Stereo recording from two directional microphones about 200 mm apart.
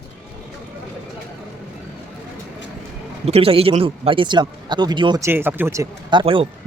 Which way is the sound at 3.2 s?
30° right (ahead or behind).